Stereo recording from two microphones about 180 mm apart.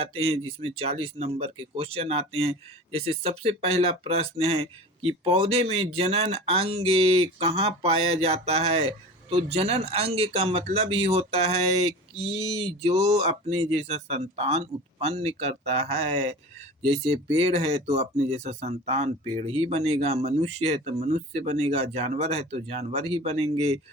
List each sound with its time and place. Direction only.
0.0 s speech: 30° right (ahead or behind)